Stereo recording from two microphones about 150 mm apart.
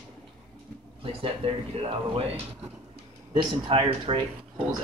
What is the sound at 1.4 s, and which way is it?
Speech, 40° right (ahead or behind).